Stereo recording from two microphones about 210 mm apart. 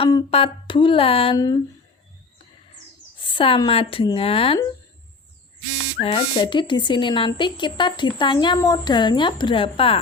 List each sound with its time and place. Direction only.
0.0 s speech: 25° left (ahead or behind)
3.2 s speech: 25° left (ahead or behind)
6.0 s speech: 25° left (ahead or behind)